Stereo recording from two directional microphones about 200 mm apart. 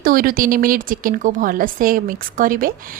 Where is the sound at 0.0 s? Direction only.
45° right (ahead or behind).